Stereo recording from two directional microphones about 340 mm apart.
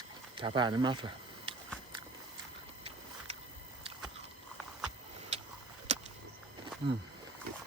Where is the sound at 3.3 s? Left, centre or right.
Centre.